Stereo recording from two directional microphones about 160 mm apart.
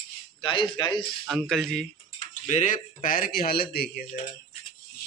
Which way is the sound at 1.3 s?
Centre (ahead or behind).